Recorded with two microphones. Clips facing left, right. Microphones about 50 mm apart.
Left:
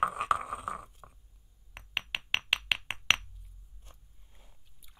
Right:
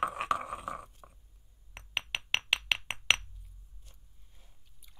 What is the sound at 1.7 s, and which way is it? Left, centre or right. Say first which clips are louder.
Chink: even; centre.